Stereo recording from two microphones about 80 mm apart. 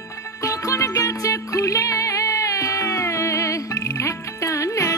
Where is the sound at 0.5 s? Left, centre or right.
Left.